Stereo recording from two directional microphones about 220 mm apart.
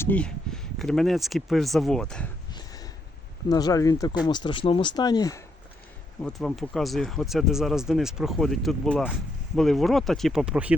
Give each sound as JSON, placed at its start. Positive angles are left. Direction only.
{"t": 0.0, "sound": "speech", "side_deg": 5}
{"t": 2.5, "sound": "a sound", "side_deg": 20}
{"t": 3.5, "sound": "speech", "side_deg": 15}
{"t": 6.2, "sound": "speech", "side_deg": 0}